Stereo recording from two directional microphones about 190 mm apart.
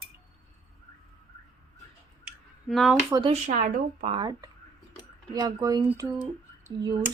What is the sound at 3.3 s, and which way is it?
A woman's voice, 40° right (ahead or behind).